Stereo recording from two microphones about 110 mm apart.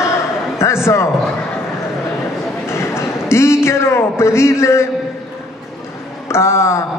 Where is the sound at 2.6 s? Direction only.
25° left (ahead or behind).